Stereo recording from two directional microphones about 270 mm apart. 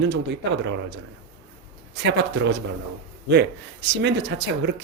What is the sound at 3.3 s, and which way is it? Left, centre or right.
Speech, right.